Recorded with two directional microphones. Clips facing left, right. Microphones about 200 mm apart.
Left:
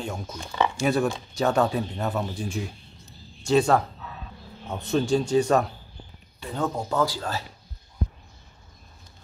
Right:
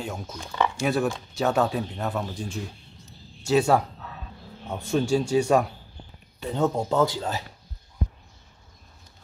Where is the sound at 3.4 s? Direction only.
5° right (ahead or behind).